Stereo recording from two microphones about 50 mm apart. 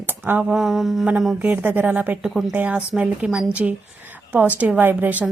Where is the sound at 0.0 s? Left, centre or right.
Right.